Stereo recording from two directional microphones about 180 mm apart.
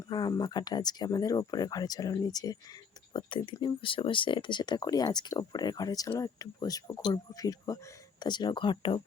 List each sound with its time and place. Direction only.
0.1 s speech: 20° left (ahead or behind)